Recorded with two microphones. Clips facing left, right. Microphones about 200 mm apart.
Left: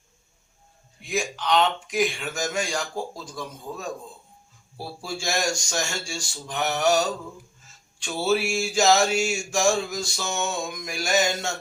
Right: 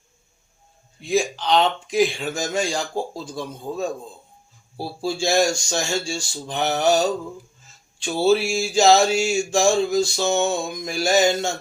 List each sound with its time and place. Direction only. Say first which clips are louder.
1.0 s mantra: right 6 dB; 30° right (ahead or behind)